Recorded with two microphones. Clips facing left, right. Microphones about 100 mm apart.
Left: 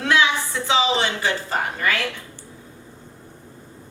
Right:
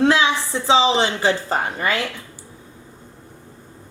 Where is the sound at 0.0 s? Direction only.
30° right (ahead or behind).